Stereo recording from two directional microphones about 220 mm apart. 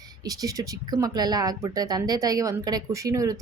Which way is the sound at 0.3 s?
15° right (ahead or behind).